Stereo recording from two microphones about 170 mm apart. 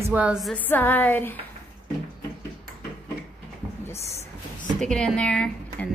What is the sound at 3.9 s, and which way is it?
Speech, 40° left (ahead or behind).